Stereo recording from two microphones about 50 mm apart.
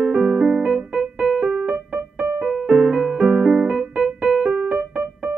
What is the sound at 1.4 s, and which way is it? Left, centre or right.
Keyboard, right.